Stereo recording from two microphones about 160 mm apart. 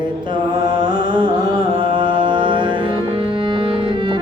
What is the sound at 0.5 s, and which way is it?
Music, 30° right (ahead or behind).